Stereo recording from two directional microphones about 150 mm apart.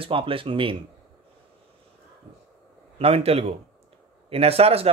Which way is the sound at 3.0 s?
40° right (ahead or behind).